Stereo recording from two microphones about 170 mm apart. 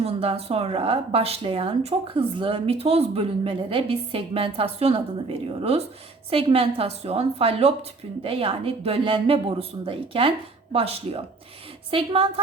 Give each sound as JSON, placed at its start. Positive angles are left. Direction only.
{"t": 0.0, "sound": "a woman's voice", "side_deg": -35}